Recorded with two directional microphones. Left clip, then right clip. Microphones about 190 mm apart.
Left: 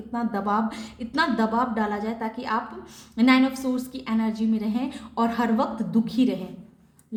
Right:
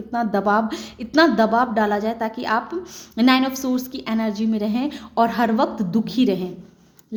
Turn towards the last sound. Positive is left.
turn(degrees=-40)  # may be behind; listen again after turning